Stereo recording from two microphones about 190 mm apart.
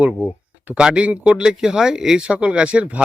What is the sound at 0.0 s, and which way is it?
Speech, 5° right (ahead or behind).